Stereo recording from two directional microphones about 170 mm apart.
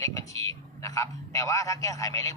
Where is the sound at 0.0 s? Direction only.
20° left (ahead or behind).